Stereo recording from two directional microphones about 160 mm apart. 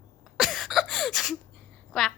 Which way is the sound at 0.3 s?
Centre (ahead or behind).